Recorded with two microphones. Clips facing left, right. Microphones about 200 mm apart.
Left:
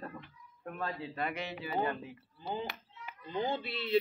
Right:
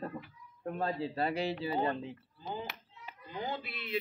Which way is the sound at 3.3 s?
25° left (ahead or behind).